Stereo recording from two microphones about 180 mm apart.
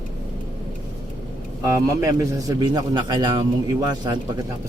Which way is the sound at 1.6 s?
15° right (ahead or behind).